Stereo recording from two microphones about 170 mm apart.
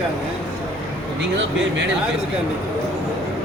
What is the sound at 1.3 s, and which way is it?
Speech, 90° right.